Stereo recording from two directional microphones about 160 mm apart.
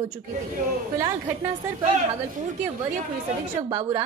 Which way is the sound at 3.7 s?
20° right (ahead or behind).